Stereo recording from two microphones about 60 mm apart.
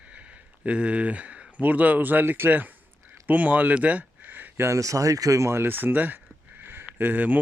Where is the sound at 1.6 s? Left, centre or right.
Right.